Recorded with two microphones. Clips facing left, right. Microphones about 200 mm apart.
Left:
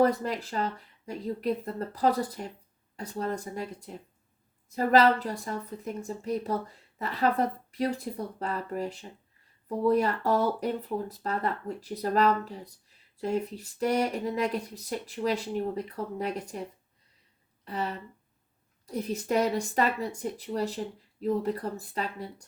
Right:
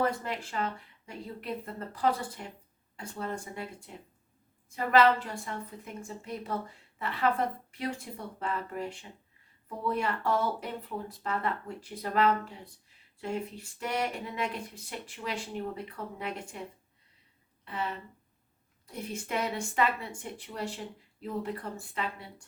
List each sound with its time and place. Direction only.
0.0 s a woman's voice: 35° left (ahead or behind)
17.7 s a woman's voice: 40° left (ahead or behind)